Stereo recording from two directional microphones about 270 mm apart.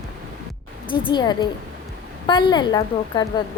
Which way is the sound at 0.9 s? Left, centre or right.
Centre.